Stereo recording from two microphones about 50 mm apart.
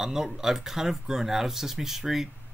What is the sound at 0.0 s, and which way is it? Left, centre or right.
Speech, centre.